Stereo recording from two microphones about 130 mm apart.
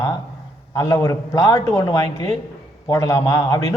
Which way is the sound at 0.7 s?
25° left (ahead or behind).